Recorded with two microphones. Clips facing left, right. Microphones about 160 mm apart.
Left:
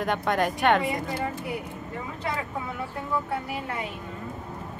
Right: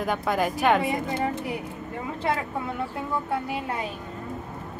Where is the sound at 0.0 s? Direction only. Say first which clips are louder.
Even; centre (ahead or behind).